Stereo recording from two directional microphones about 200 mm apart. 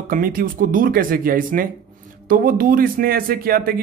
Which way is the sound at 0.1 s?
45° right (ahead or behind).